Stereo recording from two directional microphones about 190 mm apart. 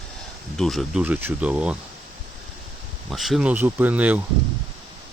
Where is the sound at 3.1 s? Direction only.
Centre (ahead or behind).